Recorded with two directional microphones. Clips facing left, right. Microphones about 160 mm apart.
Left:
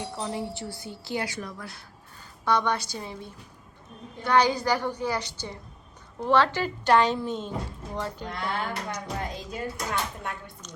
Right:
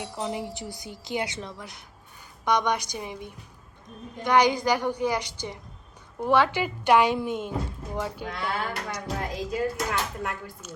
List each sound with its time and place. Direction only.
0.0 s a woman's voice: 15° right (ahead or behind)